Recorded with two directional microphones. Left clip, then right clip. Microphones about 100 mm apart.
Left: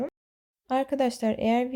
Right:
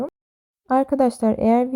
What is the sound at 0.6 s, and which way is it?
Speech, 70° right (ahead or behind).